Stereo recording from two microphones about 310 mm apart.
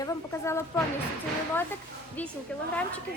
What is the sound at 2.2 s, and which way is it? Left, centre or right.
Speech, centre.